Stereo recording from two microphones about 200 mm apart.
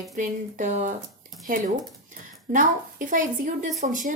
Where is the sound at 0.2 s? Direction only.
40° right (ahead or behind).